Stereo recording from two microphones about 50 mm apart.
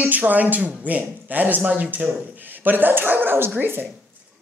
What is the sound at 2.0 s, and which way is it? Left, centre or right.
Speech, centre.